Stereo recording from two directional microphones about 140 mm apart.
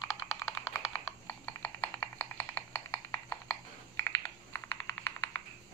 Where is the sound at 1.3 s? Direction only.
15° left (ahead or behind).